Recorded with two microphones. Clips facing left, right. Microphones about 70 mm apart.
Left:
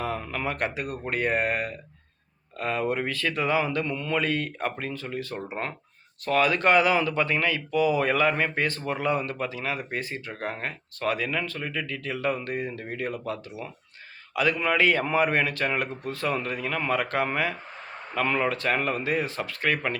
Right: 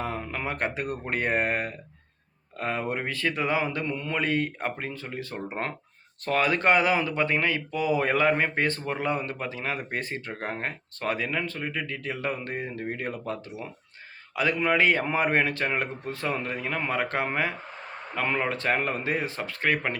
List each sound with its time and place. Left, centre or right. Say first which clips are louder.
0.0 s speech: left 2 dB; right